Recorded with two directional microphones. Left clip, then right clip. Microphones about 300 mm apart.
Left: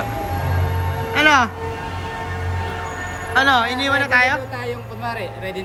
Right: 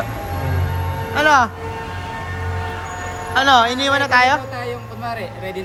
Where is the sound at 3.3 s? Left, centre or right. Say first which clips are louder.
Right 2 dB; centre.